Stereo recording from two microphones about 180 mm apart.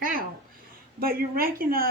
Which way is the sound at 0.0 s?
50° right (ahead or behind).